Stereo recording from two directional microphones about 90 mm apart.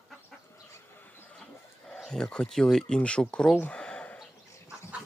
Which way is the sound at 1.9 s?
5° left (ahead or behind).